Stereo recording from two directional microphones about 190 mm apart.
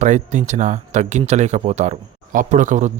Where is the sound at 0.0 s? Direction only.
40° right (ahead or behind).